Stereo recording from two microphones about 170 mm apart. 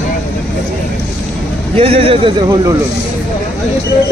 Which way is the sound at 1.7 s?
35° right (ahead or behind).